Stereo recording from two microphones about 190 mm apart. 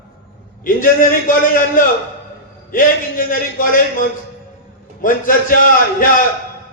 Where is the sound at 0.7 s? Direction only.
45° left (ahead or behind).